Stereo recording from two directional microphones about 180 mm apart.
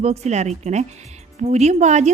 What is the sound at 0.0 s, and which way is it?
A woman's voice, 35° right (ahead or behind).